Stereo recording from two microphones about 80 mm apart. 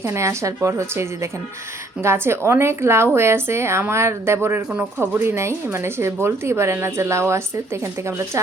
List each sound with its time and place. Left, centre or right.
0.0 s a woman's voice: right